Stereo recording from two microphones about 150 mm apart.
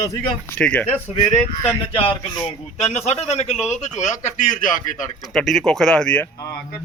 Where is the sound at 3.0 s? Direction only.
45° left (ahead or behind).